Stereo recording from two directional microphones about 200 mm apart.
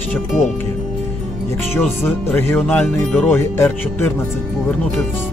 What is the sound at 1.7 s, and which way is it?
Speech, 10° left (ahead or behind).